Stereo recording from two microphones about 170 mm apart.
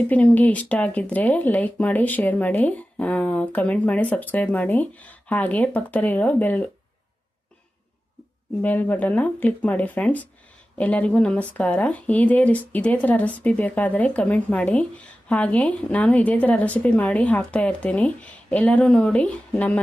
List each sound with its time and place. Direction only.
0.1 s speech: 10° left (ahead or behind)
8.6 s speech: 10° left (ahead or behind)